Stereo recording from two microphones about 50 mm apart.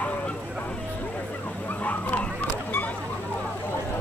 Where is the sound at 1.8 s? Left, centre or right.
Left.